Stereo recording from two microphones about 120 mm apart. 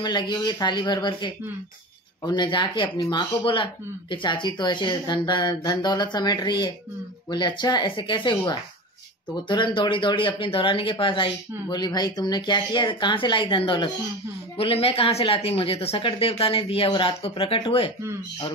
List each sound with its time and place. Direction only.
0.0 s speech: 40° left (ahead or behind)